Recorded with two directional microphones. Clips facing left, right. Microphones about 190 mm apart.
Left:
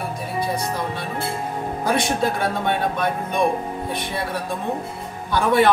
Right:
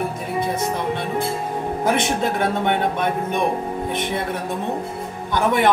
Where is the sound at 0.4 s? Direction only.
25° right (ahead or behind).